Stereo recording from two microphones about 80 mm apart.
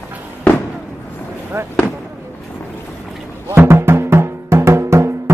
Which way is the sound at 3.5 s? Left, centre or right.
Right.